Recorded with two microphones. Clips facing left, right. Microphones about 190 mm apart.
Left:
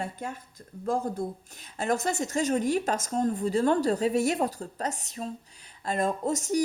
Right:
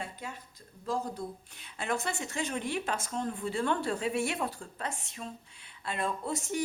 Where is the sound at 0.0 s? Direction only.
50° left (ahead or behind).